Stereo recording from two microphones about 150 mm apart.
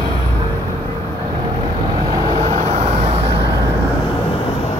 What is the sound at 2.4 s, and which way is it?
Vehicle, 45° right (ahead or behind).